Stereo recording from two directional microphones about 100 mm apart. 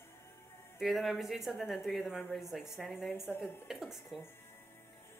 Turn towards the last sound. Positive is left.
turn(degrees=0)  # may be behind; listen again after turning